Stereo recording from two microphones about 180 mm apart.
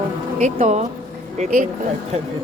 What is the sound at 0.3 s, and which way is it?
A woman's voice, 40° right (ahead or behind).